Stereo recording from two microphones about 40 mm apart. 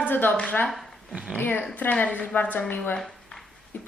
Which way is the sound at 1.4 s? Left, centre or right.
Left.